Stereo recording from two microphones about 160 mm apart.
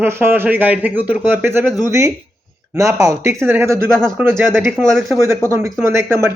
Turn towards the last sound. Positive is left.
turn(degrees=-15)  # may be behind; listen again after turning